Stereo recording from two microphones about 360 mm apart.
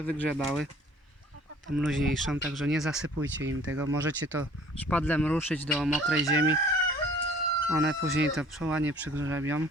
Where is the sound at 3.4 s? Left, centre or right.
Right.